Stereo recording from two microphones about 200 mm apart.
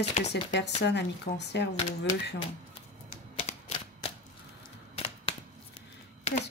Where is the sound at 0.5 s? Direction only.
60° left (ahead or behind).